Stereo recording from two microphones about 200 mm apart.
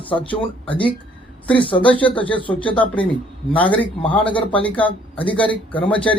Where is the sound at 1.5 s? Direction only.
5° left (ahead or behind).